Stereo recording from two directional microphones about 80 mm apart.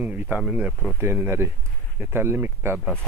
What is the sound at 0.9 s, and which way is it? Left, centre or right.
Speech, right.